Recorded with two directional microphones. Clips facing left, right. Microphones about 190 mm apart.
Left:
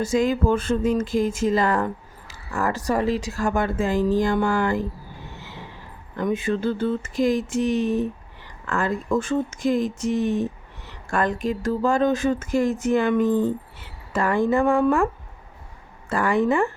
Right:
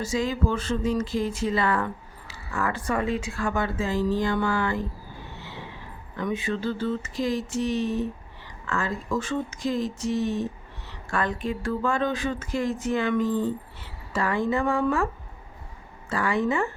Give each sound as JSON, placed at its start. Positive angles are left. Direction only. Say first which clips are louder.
{"t": 0.0, "sound": "speech", "louder": "left 5 dB", "side_deg": 50}
{"t": 6.1, "sound": "speech", "louder": "left 5 dB", "side_deg": 50}
{"t": 16.0, "sound": "speech", "louder": "left 4 dB", "side_deg": 50}